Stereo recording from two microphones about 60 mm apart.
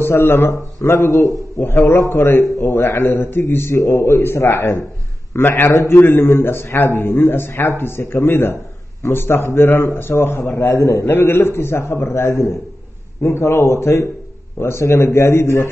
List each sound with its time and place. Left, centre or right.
0.0 s a man's voice: left
10.6 s a man's voice: left